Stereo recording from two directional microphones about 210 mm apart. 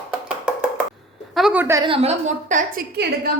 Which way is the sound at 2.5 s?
40° right (ahead or behind).